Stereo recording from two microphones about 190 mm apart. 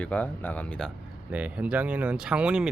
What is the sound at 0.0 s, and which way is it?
Speech, 10° left (ahead or behind).